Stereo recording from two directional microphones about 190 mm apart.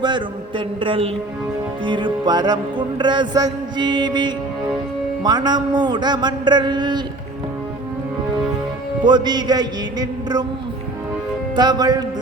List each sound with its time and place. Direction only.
0.0 s music: 25° right (ahead or behind)
9.0 s music: 20° right (ahead or behind)
11.5 s music: 20° right (ahead or behind)